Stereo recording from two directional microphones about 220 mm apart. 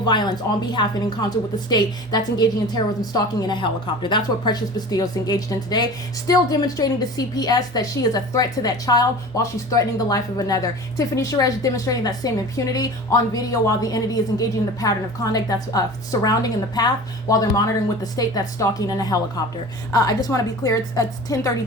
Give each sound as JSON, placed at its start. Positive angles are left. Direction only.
{"t": 0.0, "sound": "a woman's voice", "side_deg": 20}